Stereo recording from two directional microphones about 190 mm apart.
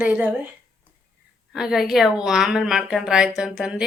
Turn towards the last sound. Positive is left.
turn(degrees=0)  # may be behind; listen again after turning